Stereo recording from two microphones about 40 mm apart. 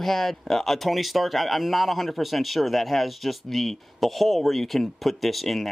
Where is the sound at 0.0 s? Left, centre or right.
Centre.